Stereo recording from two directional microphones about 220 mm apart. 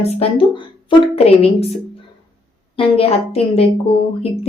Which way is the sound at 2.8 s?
25° left (ahead or behind).